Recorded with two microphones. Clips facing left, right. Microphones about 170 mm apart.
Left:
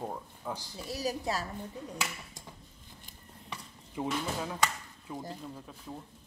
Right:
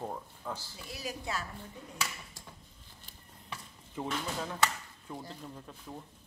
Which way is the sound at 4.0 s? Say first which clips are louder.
Left 2 dB; 15° left (ahead or behind).